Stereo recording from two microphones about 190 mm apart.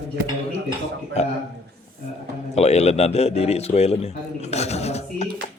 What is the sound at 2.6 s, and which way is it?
A man's voice, 35° left (ahead or behind).